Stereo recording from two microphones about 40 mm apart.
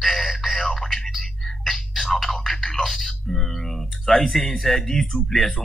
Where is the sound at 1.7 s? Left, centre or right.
Centre.